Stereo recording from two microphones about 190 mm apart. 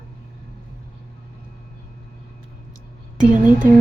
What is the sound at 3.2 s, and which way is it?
Speech, 40° right (ahead or behind).